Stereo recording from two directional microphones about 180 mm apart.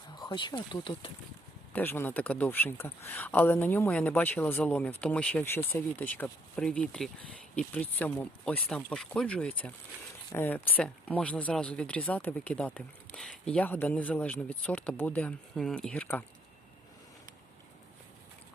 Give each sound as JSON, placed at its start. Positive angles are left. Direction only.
{"t": 0.2, "sound": "speech", "side_deg": 25}
{"t": 1.7, "sound": "speech", "side_deg": 10}